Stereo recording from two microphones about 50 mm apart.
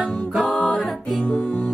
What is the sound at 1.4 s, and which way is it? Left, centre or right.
Music, left.